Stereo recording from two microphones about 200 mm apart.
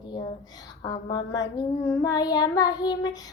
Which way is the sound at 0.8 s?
20° left (ahead or behind).